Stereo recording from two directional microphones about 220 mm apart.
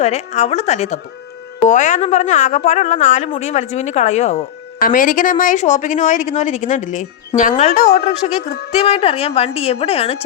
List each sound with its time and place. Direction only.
0.0 s a woman's voice: 30° left (ahead or behind)